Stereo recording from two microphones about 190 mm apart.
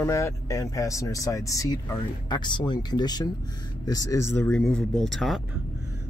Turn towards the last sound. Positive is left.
turn(degrees=0)  # may be behind; listen again after turning